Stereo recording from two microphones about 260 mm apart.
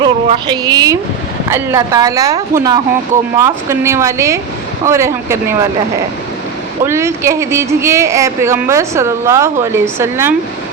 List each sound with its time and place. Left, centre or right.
0.0 s speech: centre
6.8 s speech: centre